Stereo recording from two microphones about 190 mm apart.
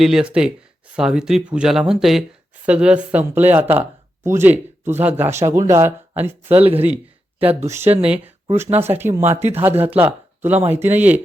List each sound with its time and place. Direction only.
0.0 s speech: 5° right (ahead or behind)
6.5 s speech: 30° right (ahead or behind)
8.0 s speech: 5° right (ahead or behind)